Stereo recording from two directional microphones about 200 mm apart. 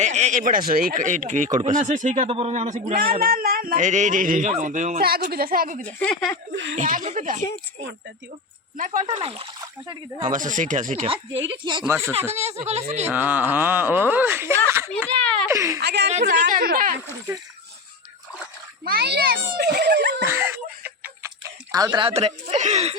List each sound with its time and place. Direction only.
0.0 s speech: 35° right (ahead or behind)
6.0 s speech: 15° left (ahead or behind)
6.7 s speech: 40° right (ahead or behind)
8.8 s speech: 40° right (ahead or behind)
10.2 s speech: 40° right (ahead or behind)
11.5 s speech: 25° right (ahead or behind)
13.1 s speech: 10° right (ahead or behind)
15.8 s a woman's voice: 55° right (ahead or behind)
16.1 s a child's voice: 35° right (ahead or behind)
18.9 s a child's voice: 55° right (ahead or behind)
20.2 s a sound: 10° right (ahead or behind)
21.7 s speech: 20° right (ahead or behind); by 23.0 s 35° right (ahead or behind)